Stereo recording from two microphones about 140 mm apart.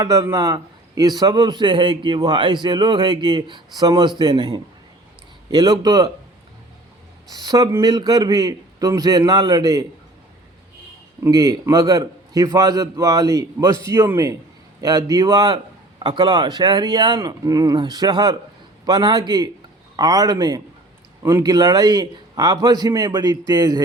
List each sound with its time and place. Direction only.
0.0 s a man's voice: 25° right (ahead or behind)
7.3 s a man's voice: 30° right (ahead or behind)
11.2 s a man's voice: 25° right (ahead or behind)